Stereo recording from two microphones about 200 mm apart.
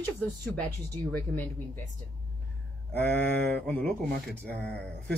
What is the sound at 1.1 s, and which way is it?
Speech, 10° left (ahead or behind).